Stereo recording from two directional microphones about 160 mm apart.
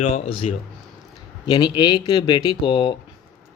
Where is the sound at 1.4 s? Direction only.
30° left (ahead or behind).